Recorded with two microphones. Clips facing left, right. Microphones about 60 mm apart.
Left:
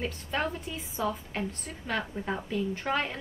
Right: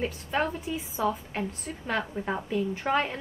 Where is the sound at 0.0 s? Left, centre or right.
Centre.